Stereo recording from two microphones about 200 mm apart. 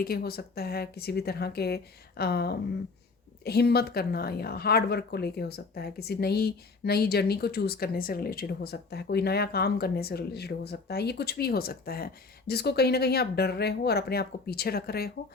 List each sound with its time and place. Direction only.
0.0 s a woman's voice: 50° left (ahead or behind)